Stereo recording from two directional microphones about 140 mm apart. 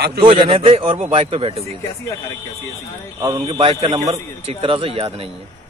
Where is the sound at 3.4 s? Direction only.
45° right (ahead or behind).